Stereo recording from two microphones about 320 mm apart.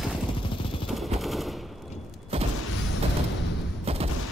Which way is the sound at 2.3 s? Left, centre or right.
Centre.